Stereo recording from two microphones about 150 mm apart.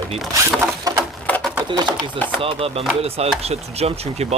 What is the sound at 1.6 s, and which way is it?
Speech, 30° right (ahead or behind).